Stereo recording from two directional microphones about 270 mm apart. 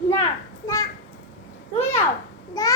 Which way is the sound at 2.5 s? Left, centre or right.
Centre.